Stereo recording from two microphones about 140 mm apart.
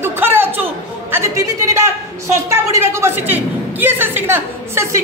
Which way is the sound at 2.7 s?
20° right (ahead or behind).